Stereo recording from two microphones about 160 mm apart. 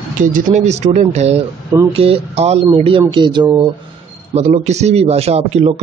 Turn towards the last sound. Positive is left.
turn(degrees=-40)  # may be behind; listen again after turning